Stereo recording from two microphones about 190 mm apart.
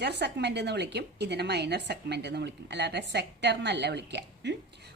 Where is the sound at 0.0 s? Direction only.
60° right (ahead or behind).